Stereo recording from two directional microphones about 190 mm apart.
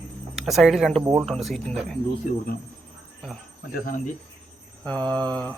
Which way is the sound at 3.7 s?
45° left (ahead or behind).